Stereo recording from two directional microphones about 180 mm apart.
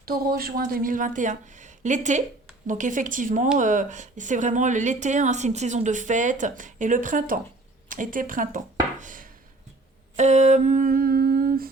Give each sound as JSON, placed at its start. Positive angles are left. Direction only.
{"t": 0.0, "sound": "a woman's voice", "side_deg": -55}
{"t": 10.2, "sound": "humming", "side_deg": -40}